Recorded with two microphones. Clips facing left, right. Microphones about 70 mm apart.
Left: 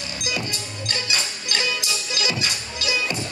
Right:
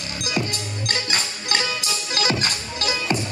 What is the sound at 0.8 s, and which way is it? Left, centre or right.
Music, right.